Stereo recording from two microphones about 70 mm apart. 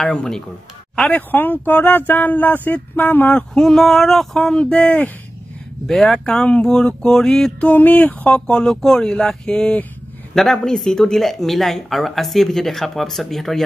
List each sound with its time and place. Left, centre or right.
0.0 s speech: centre
1.1 s speech: left
3.5 s speech: centre
5.9 s speech: centre
7.6 s speech: left
8.5 s speech: centre